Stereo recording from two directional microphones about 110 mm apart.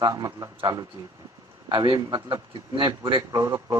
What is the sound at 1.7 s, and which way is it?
Speech, 40° right (ahead or behind).